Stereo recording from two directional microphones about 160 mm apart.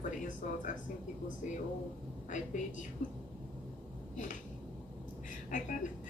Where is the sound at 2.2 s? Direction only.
50° left (ahead or behind).